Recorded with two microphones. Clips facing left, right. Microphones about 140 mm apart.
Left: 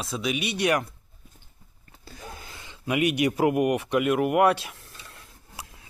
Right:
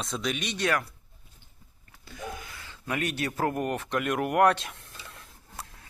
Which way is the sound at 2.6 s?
15° left (ahead or behind).